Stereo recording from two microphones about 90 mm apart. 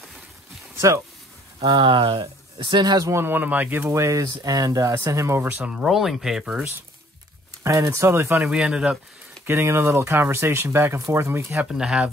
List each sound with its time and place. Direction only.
0.7 s speech: 35° right (ahead or behind)
1.6 s speech: 60° right (ahead or behind)
3.1 s speech: 25° right (ahead or behind)
3.9 s speech: 30° right (ahead or behind)
5.4 s speech: 20° right (ahead or behind)
5.7 s speech: 5° right (ahead or behind)
7.6 s speech: 35° right (ahead or behind)
8.5 s speech: 10° right (ahead or behind)
9.5 s speech: 30° right (ahead or behind)
11.5 s speech: 5° right (ahead or behind)